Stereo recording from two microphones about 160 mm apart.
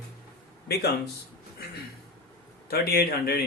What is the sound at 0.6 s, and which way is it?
Speech, 90° left.